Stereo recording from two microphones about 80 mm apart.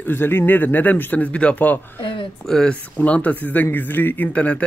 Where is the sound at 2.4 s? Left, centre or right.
Centre.